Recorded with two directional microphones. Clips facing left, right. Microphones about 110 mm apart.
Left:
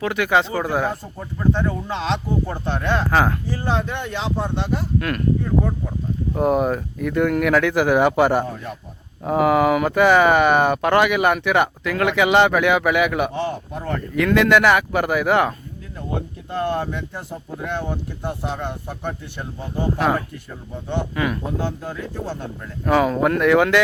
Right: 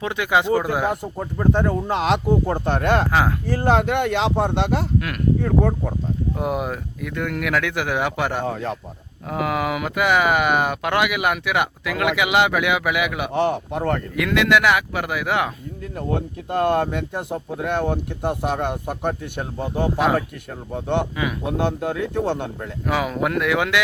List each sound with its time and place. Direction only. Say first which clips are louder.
0.0 s speech: left 1 dB; 20° right (ahead or behind)
1.2 s speech: right 1 dB; 45° right (ahead or behind)
3.1 s speech: left 1 dB; 5° right (ahead or behind)
3.4 s speech: right 5 dB; 55° right (ahead or behind); by 4.9 s 80° right
4.9 s speech: left 2 dB; 5° right (ahead or behind)
5.4 s speech: right 2 dB; 75° right (ahead or behind)
6.3 s speech: left 9 dB; 5° right (ahead or behind)
8.4 s a man's voice: right 5 dB; 90° right
9.2 s speech: left 7 dB; 5° left (ahead or behind)
13.3 s speech: right 5 dB; 75° right (ahead or behind)
14.2 s speech: left 4 dB; centre (ahead or behind)
16.5 s speech: right 4 dB; 60° right (ahead or behind)
22.9 s speech: left 5 dB; 5° right (ahead or behind)